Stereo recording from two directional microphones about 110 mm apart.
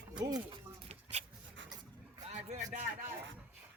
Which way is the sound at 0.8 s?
85° right.